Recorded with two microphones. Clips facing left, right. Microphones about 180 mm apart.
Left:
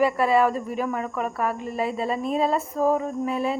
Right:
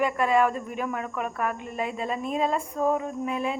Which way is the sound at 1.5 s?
35° left (ahead or behind).